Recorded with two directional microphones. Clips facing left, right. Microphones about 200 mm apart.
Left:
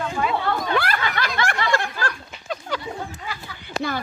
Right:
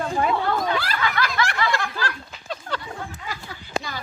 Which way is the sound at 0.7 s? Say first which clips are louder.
Left 4 dB; 55° left (ahead or behind).